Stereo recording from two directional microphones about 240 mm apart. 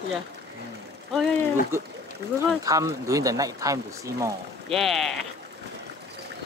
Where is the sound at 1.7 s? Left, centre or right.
Centre.